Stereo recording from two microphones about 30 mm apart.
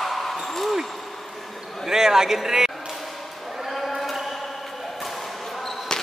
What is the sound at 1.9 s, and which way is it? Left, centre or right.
Speech, centre.